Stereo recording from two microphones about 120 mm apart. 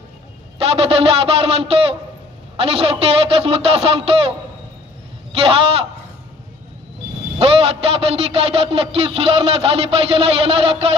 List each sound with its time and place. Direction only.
0.6 s a man's voice: 55° right (ahead or behind)
5.3 s a man's voice: 50° right (ahead or behind)
7.3 s a man's voice: 55° right (ahead or behind)